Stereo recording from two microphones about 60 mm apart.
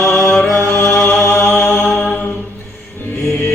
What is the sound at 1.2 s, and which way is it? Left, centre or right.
Mantra, left.